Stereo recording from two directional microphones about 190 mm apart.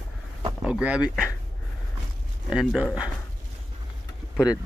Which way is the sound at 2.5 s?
5° right (ahead or behind).